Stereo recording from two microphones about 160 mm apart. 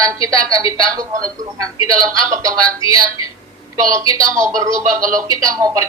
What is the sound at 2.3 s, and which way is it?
A woman's voice, 20° right (ahead or behind).